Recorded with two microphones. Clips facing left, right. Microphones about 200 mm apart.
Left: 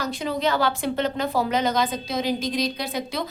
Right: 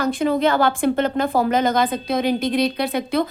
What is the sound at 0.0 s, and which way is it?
A woman's voice, 55° right (ahead or behind).